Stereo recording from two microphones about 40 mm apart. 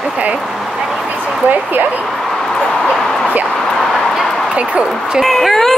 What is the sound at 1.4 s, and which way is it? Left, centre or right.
Speech, right.